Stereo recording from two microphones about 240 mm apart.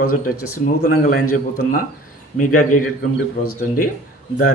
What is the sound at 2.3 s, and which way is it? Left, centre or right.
Speech, left.